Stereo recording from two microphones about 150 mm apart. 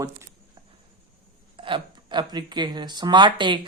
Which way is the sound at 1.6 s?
35° right (ahead or behind).